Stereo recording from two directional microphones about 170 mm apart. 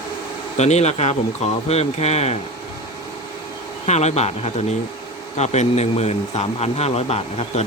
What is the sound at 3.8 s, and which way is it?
A man's voice, 40° left (ahead or behind).